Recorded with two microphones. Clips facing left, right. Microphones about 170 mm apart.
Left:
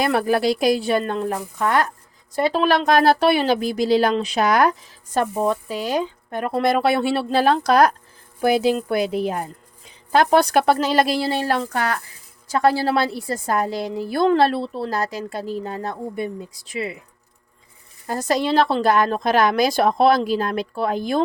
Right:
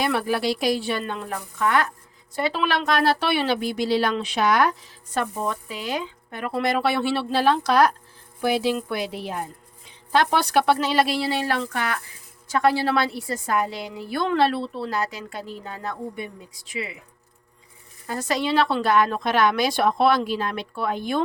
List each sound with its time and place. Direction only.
0.0 s a woman's voice: 45° left (ahead or behind)
18.0 s a woman's voice: 40° left (ahead or behind)